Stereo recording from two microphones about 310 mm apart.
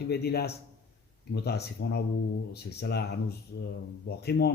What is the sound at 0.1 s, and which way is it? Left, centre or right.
Speech, left.